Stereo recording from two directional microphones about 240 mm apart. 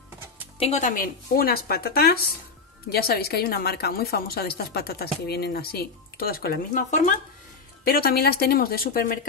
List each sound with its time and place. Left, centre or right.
0.6 s a woman's voice: left